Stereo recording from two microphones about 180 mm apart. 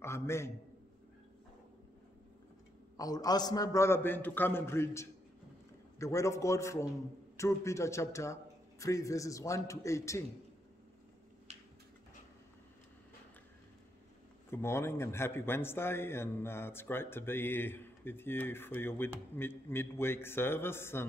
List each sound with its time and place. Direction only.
0.0 s a man's voice: 15° left (ahead or behind)
3.0 s a man's voice: 20° left (ahead or behind)
11.5 s a sound: 35° right (ahead or behind)
14.5 s a man's voice: 15° left (ahead or behind)